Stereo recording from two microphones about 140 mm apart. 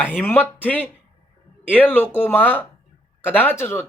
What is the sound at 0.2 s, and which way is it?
Speech, 15° left (ahead or behind).